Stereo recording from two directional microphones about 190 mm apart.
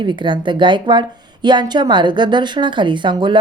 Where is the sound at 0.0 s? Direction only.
25° right (ahead or behind).